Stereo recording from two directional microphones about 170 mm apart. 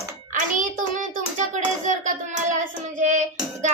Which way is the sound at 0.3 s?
50° right (ahead or behind).